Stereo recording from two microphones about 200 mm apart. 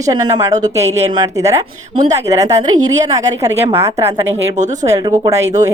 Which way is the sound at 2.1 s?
15° right (ahead or behind).